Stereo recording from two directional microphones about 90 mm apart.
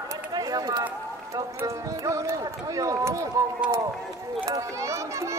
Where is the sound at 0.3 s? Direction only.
45° right (ahead or behind).